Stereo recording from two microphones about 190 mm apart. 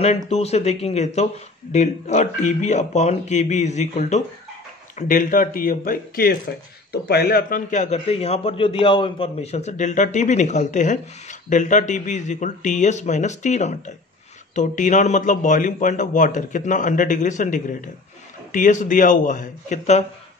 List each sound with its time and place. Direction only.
0.0 s a man's voice: 35° left (ahead or behind)